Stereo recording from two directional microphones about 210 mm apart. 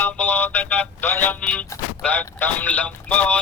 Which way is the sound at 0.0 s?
5° left (ahead or behind).